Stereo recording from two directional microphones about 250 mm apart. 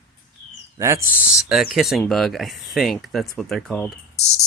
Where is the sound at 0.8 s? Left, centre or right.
Centre.